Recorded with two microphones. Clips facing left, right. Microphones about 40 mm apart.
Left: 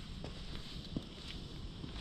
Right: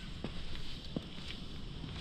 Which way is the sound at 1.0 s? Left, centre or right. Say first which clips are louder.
Right 2 dB; right.